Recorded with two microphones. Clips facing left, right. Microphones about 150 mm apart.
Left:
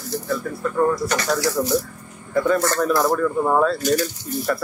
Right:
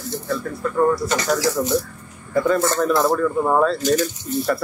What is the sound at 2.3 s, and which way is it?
Speech, centre (ahead or behind).